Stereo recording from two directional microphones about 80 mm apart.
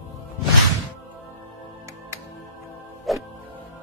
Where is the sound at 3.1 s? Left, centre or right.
Centre.